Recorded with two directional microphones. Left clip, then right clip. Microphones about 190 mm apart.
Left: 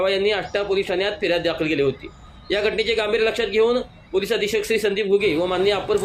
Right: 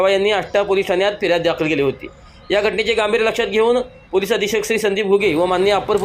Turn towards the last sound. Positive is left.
turn(degrees=-15)  # may be behind; listen again after turning